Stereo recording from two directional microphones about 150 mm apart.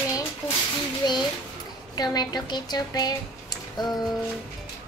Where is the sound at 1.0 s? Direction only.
25° left (ahead or behind).